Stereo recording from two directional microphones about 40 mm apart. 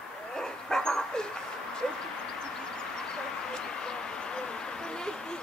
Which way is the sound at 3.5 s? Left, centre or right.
Centre.